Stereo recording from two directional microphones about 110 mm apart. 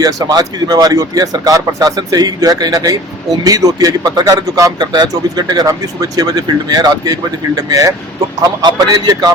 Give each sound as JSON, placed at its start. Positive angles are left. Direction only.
{"t": 0.0, "sound": "a man's voice", "side_deg": -35}